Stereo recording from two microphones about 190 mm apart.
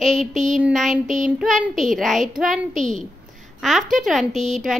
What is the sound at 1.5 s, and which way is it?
Speech, 40° right (ahead or behind).